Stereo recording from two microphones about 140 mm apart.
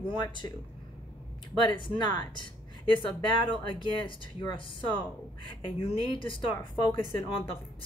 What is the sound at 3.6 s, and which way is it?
Speech, 35° left (ahead or behind).